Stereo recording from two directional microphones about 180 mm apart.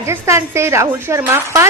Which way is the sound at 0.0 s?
15° right (ahead or behind).